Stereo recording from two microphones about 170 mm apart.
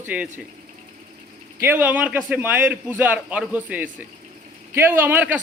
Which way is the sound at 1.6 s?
10° right (ahead or behind).